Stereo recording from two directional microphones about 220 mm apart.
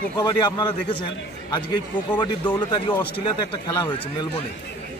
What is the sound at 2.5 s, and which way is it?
Speech, 20° left (ahead or behind).